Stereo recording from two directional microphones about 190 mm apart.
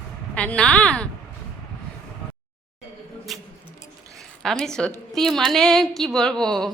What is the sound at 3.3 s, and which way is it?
A woman's voice, centre (ahead or behind).